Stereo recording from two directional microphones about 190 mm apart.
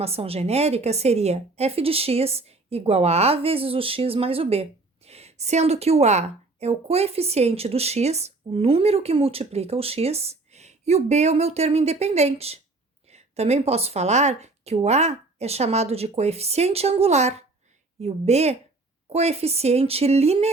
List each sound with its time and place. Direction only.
0.0 s a woman's voice: 30° right (ahead or behind)